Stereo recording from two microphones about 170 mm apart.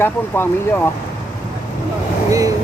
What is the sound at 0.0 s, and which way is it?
Speech, 15° left (ahead or behind).